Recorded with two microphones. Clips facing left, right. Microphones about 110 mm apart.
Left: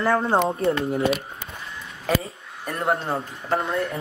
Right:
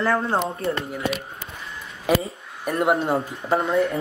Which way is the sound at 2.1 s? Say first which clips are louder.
Right 3 dB; 15° right (ahead or behind).